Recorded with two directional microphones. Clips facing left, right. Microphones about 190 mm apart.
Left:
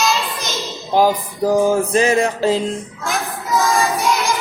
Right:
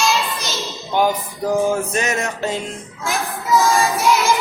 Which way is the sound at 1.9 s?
30° left (ahead or behind).